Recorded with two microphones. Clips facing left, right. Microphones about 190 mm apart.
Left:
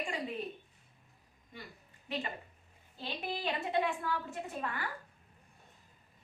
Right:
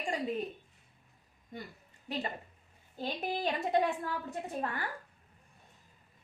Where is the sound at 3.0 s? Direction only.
45° right (ahead or behind).